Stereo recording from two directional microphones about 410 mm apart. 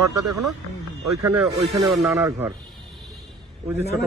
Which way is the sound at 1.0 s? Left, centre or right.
Centre.